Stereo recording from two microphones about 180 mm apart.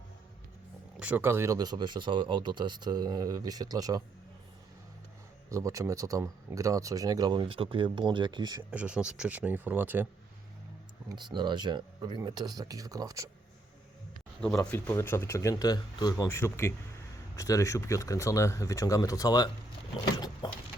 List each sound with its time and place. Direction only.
0.9 s speech: 10° right (ahead or behind)
5.5 s speech: 15° right (ahead or behind)
8.7 s speech: 5° right (ahead or behind)
11.1 s speech: 25° right (ahead or behind)
14.6 s a man's voice: 5° left (ahead or behind)
20.4 s a sound: 25° left (ahead or behind)